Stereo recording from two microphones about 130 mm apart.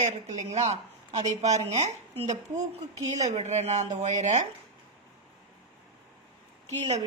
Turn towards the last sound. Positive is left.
turn(degrees=-65)  # may be behind; listen again after turning